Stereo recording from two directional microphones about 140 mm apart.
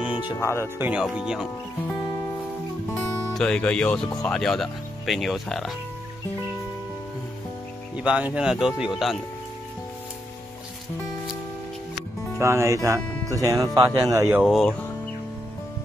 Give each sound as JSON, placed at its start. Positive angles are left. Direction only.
{"t": 0.4, "sound": "speech", "side_deg": 20}
{"t": 0.7, "sound": "speech", "side_deg": -10}
{"t": 2.9, "sound": "speech", "side_deg": 5}
{"t": 7.9, "sound": "speech", "side_deg": -10}
{"t": 12.4, "sound": "speech", "side_deg": -20}
{"t": 14.4, "sound": "speech", "side_deg": 0}